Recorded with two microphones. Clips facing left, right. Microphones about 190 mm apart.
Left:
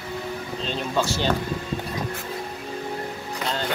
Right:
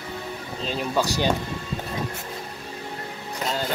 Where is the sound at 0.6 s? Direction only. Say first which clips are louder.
Right 1 dB; 5° right (ahead or behind).